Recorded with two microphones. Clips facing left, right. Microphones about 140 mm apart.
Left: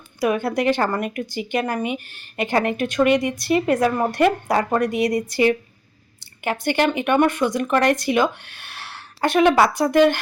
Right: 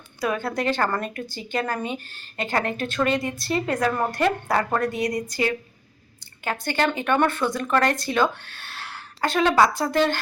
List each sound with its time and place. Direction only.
0.2 s a woman's voice: 20° left (ahead or behind)